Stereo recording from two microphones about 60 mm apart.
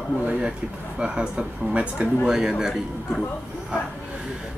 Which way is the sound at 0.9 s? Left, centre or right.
Centre.